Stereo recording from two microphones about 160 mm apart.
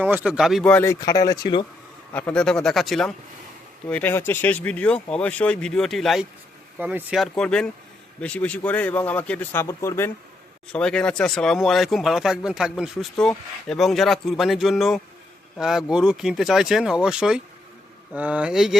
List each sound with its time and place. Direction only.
0.0 s speech: 10° right (ahead or behind); by 0.9 s 10° left (ahead or behind)
1.0 s speech: 25° left (ahead or behind)
2.1 s speech: 5° left (ahead or behind)
6.7 s speech: 10° right (ahead or behind); by 10.1 s 15° left (ahead or behind)
10.7 s speech: 5° left (ahead or behind)